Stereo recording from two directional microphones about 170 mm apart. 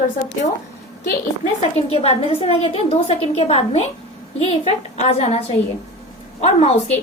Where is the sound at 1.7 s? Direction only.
35° left (ahead or behind).